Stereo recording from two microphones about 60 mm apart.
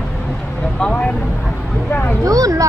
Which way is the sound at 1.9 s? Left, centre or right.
Left.